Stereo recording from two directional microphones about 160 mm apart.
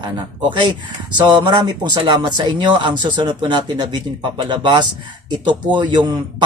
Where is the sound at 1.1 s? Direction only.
30° right (ahead or behind).